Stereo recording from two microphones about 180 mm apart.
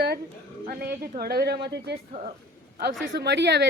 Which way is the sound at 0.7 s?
55° right (ahead or behind).